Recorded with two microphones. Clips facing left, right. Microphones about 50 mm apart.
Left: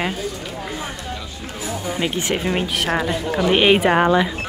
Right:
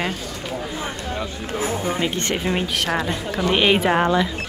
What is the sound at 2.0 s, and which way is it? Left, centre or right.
Speech, centre.